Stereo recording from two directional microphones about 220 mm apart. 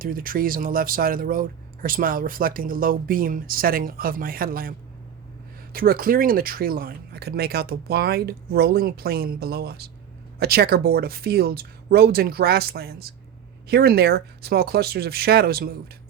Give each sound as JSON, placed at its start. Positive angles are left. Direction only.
{"t": 0.0, "sound": "speech", "side_deg": -40}
{"t": 5.7, "sound": "speech", "side_deg": -40}